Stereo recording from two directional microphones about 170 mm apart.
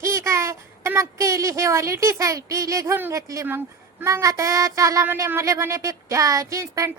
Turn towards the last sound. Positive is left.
turn(degrees=-20)  # may be behind; listen again after turning